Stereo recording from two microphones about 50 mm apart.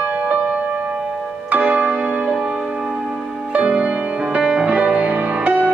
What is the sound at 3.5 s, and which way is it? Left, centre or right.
Music, right.